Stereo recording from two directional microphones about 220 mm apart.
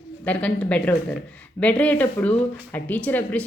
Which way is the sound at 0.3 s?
5° left (ahead or behind).